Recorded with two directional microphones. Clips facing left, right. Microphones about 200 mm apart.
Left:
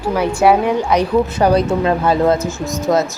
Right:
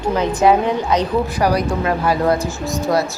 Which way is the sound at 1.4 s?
25° left (ahead or behind).